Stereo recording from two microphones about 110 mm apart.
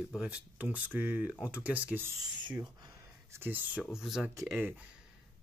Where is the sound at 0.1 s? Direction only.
10° right (ahead or behind).